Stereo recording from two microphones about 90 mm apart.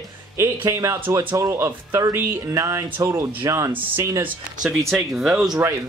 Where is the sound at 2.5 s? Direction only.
35° right (ahead or behind).